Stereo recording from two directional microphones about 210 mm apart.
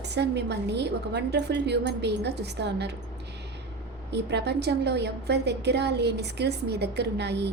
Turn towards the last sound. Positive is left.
turn(degrees=-55)  # may be behind; listen again after turning